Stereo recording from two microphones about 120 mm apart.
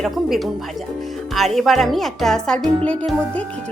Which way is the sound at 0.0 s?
Centre (ahead or behind).